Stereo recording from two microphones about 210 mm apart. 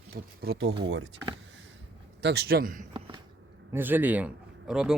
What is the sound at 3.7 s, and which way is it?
A man's voice, 10° right (ahead or behind).